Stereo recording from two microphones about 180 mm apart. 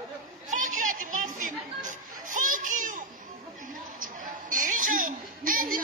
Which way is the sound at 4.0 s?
45° right (ahead or behind).